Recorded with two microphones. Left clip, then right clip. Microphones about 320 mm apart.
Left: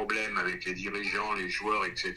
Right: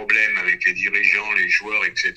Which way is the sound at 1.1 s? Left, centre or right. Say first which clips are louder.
Right 12 dB; centre.